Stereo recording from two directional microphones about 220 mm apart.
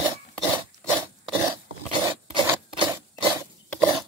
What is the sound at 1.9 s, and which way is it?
Dog, 20° right (ahead or behind).